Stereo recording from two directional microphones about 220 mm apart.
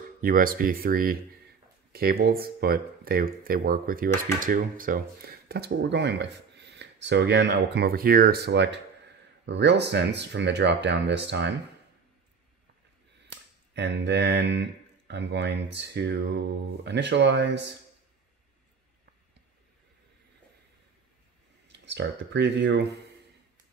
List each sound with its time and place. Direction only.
0.2 s speech: 40° right (ahead or behind)
13.7 s speech: 50° right (ahead or behind)
21.8 s speech: 55° right (ahead or behind)